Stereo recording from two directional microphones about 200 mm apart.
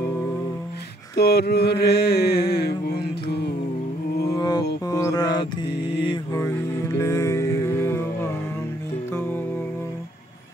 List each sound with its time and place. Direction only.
1.1 s mantra: 55° left (ahead or behind)
4.3 s mantra: 20° left (ahead or behind)
7.0 s music: 15° left (ahead or behind)